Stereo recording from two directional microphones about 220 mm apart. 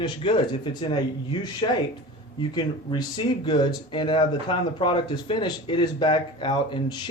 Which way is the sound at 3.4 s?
20° left (ahead or behind).